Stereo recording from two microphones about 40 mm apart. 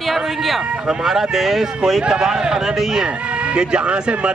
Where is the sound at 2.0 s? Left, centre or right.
Centre.